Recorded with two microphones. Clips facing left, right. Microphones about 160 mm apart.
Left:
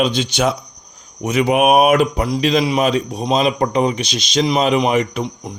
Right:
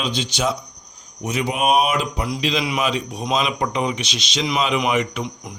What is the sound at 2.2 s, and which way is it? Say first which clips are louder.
Speech: left 6 dB; 40° left (ahead or behind).